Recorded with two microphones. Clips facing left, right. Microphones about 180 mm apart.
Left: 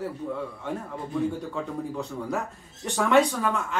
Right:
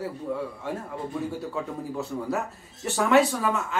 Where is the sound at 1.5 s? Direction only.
5° right (ahead or behind).